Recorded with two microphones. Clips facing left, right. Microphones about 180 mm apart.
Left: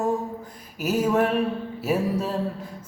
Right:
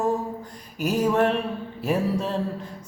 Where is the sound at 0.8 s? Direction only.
5° left (ahead or behind).